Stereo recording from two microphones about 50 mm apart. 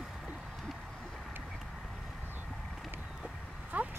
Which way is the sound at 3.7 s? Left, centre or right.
Right.